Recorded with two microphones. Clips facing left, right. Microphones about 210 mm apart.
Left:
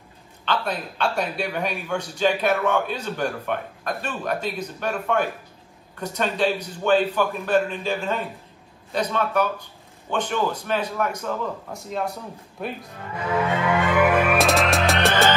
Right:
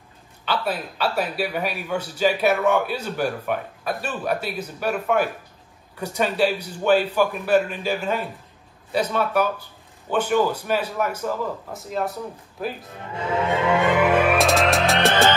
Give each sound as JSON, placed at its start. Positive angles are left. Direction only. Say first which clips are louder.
{"t": 0.5, "sound": "a man's voice", "louder": "right 1 dB", "side_deg": -5}
{"t": 13.1, "sound": "music", "louder": "right 1 dB", "side_deg": -25}
{"t": 14.4, "sound": "music", "louder": "right 1 dB", "side_deg": 0}